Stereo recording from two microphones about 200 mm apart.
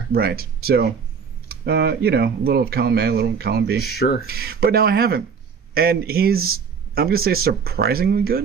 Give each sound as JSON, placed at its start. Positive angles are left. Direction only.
{"t": 0.1, "sound": "speech", "side_deg": -50}
{"t": 3.8, "sound": "speech", "side_deg": 55}
{"t": 4.3, "sound": "speech", "side_deg": -50}